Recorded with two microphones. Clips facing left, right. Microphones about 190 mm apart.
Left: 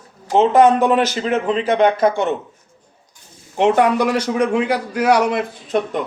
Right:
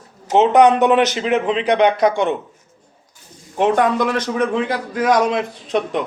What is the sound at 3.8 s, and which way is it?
A man's voice, 10° left (ahead or behind).